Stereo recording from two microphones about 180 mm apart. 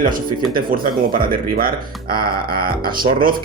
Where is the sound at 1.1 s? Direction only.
55° right (ahead or behind).